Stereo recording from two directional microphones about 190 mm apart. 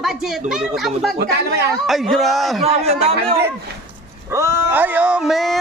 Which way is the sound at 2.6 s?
35° right (ahead or behind).